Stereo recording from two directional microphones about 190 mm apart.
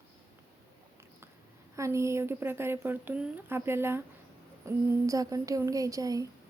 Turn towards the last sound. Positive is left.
turn(degrees=-20)  # may be behind; listen again after turning